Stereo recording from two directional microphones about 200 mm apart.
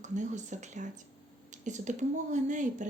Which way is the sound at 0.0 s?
35° right (ahead or behind).